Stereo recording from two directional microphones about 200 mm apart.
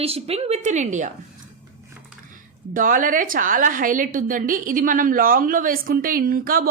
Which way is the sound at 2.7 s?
40° right (ahead or behind).